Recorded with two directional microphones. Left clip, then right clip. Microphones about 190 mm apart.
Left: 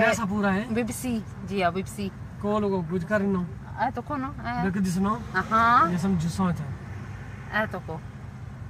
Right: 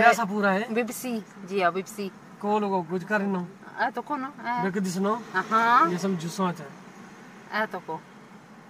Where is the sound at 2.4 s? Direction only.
30° right (ahead or behind).